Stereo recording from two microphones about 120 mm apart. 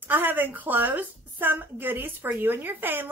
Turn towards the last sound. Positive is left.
turn(degrees=-15)  # may be behind; listen again after turning